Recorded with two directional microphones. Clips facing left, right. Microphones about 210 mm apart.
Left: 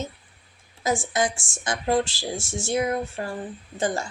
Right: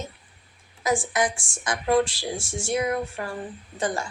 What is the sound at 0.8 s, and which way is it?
Speech, 25° left (ahead or behind).